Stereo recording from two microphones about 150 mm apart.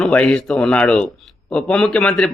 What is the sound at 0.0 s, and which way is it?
A man's voice, 5° left (ahead or behind).